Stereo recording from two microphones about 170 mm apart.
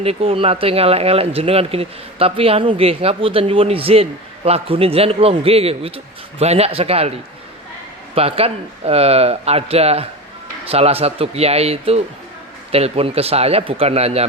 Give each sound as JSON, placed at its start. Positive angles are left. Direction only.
{"t": 0.0, "sound": "speech", "side_deg": -35}
{"t": 8.1, "sound": "speech", "side_deg": -35}